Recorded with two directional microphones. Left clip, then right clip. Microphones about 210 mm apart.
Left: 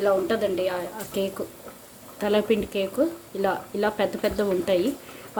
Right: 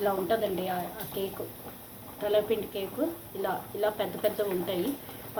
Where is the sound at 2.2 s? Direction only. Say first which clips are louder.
Left 4 dB; 55° left (ahead or behind).